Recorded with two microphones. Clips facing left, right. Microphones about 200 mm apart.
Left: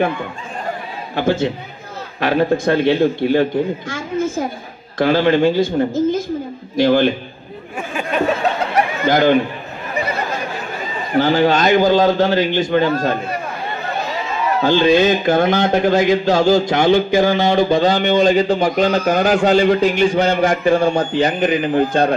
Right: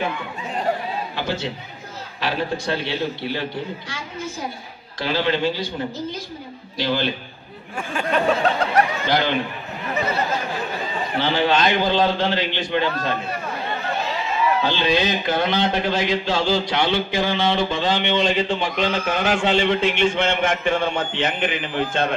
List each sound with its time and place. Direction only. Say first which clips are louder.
1.1 s a man's voice: left 14 dB; 50° left (ahead or behind)
7.9 s a sound: left 1 dB; 10° left (ahead or behind)
9.0 s a man's voice: left 8 dB; 45° left (ahead or behind)
11.1 s a man's voice: left 6 dB; 45° left (ahead or behind)
14.6 s a man's voice: left 8 dB; 50° left (ahead or behind)